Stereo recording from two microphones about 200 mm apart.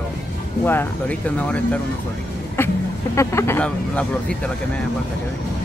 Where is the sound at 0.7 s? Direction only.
10° left (ahead or behind).